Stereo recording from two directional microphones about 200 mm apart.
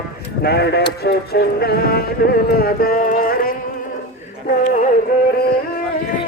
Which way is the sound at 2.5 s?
50° left (ahead or behind).